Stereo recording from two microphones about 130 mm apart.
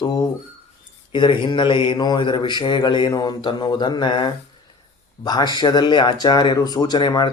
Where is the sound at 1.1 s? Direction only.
40° left (ahead or behind).